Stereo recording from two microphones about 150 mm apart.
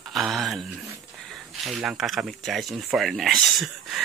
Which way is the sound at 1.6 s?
Centre (ahead or behind).